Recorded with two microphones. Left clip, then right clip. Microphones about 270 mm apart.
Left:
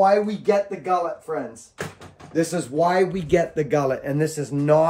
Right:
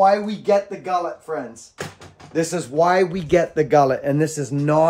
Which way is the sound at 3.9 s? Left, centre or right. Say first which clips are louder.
Right 3 dB; right.